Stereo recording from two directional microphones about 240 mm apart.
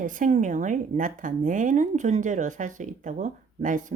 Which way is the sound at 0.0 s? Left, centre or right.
Right.